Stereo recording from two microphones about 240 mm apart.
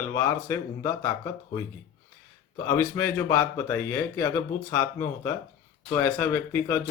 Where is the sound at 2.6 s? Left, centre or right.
Centre.